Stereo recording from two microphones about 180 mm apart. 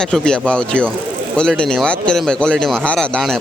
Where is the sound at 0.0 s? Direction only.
5° left (ahead or behind).